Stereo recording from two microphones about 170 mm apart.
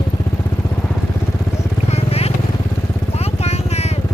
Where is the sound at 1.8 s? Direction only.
35° left (ahead or behind).